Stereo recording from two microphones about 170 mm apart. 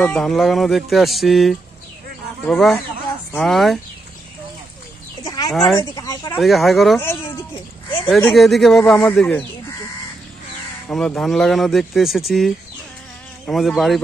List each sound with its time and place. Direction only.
0.0 s speech: 5° left (ahead or behind)
5.2 s chicken: 25° left (ahead or behind)
5.5 s speech: centre (ahead or behind)
5.8 s speech: 25° left (ahead or behind)
6.4 s speech: centre (ahead or behind)
7.0 s speech: 15° left (ahead or behind)
8.3 s speech: centre (ahead or behind)
10.9 s speech: 5° left (ahead or behind)